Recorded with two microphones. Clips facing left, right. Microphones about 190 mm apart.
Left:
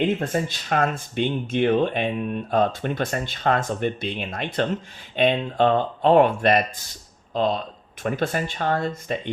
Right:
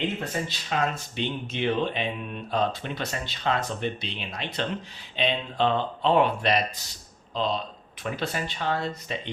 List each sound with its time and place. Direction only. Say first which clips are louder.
0.2 s speech: left 6 dB; 50° left (ahead or behind)